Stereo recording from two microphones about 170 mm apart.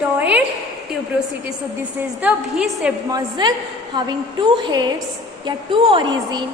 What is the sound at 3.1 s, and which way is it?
A woman's voice, 25° right (ahead or behind).